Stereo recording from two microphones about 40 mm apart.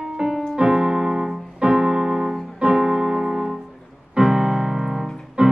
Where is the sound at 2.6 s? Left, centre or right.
Centre.